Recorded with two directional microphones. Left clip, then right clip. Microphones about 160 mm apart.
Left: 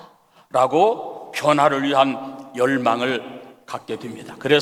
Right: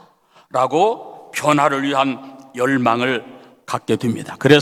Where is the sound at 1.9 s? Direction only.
25° right (ahead or behind).